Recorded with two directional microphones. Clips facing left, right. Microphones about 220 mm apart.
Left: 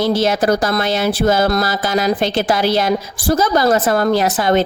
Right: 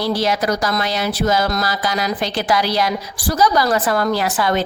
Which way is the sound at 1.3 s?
55° left (ahead or behind).